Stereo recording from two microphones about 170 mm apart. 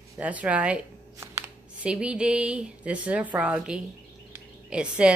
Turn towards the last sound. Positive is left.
turn(degrees=-5)  # may be behind; listen again after turning